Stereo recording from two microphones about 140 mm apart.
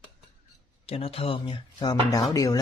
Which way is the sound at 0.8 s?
45° left (ahead or behind).